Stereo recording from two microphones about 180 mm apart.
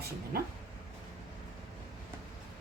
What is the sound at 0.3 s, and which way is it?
Speech, 55° right (ahead or behind).